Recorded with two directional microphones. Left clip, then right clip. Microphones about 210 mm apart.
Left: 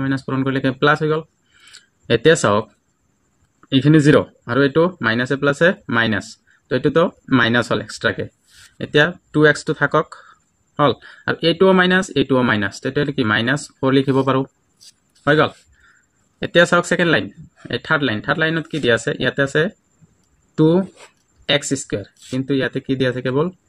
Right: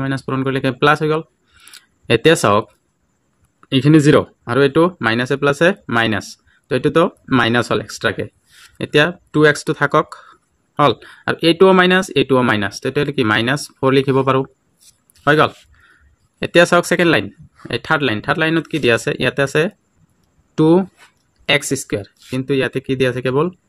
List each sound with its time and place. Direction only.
0.0 s speech: 30° right (ahead or behind)
3.6 s speech: 35° right (ahead or behind)